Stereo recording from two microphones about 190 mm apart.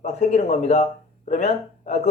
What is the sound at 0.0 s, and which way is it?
Speech, 35° left (ahead or behind).